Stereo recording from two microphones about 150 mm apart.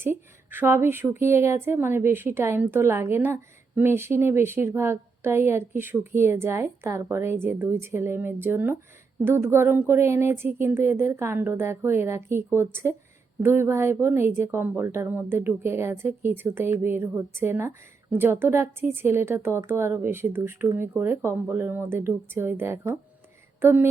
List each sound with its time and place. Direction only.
0.0 s a woman's voice: 15° right (ahead or behind)